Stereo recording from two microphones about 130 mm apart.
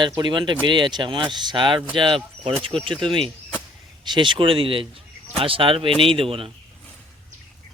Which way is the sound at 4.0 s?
35° right (ahead or behind).